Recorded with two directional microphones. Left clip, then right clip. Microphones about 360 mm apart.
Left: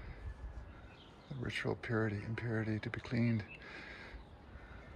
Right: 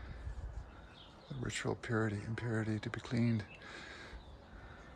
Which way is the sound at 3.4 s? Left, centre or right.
Centre.